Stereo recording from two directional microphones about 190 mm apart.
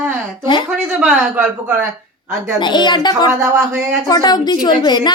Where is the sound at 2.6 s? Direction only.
25° left (ahead or behind).